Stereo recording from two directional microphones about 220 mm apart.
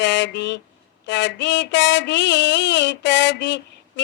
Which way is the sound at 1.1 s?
55° left (ahead or behind).